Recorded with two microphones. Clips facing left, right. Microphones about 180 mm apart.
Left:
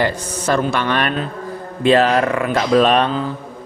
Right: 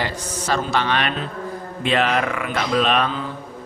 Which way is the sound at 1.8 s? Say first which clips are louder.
Left 7 dB; 35° left (ahead or behind).